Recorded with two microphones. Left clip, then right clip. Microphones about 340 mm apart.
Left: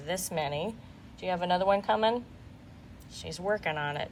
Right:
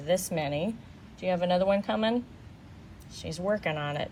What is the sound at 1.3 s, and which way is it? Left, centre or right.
Speech, centre.